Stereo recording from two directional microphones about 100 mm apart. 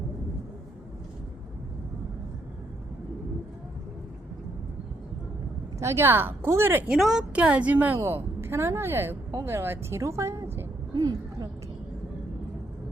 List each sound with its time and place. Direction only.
5.8 s a woman's voice: 25° right (ahead or behind)
6.9 s a woman's voice: 5° right (ahead or behind); by 10.7 s 25° right (ahead or behind)
10.9 s a sound: 40° right (ahead or behind)